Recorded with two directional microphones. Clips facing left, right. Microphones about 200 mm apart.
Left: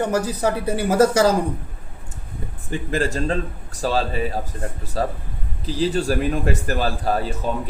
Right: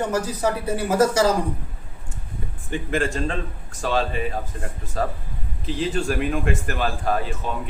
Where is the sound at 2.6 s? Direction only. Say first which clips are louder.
Left 1 dB; 40° left (ahead or behind).